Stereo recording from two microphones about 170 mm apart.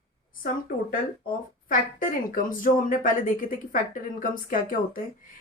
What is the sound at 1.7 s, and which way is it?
Speech, 55° left (ahead or behind).